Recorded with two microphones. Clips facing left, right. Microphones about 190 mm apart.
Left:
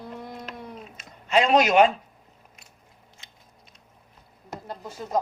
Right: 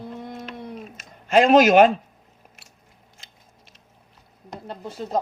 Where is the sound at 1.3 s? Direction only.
50° right (ahead or behind).